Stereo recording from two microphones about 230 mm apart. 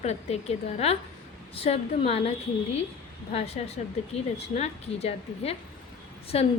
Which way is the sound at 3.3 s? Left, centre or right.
Left.